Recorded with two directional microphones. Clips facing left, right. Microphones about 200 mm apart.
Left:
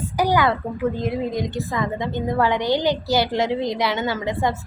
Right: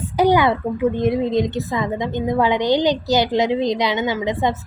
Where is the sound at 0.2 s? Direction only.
20° right (ahead or behind).